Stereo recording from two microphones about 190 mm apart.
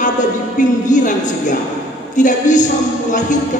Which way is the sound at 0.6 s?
40° left (ahead or behind).